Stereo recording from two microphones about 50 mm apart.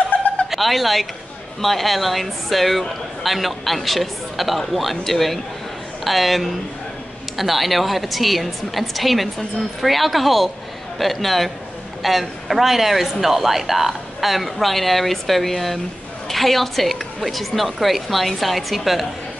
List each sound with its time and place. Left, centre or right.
0.1 s chuckle: left
0.5 s a woman's voice: centre